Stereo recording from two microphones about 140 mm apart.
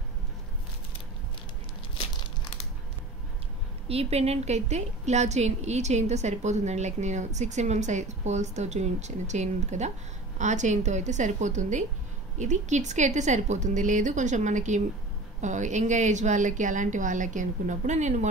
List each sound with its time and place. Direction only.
3.9 s a woman's voice: 45° right (ahead or behind)